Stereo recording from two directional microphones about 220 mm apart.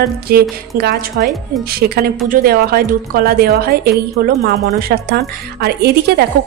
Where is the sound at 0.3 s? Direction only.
45° right (ahead or behind).